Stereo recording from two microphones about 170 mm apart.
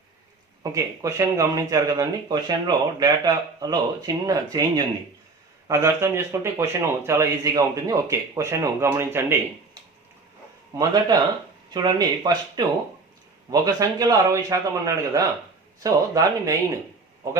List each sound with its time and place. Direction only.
0.6 s speech: 20° right (ahead or behind)
11.7 s speech: 25° right (ahead or behind)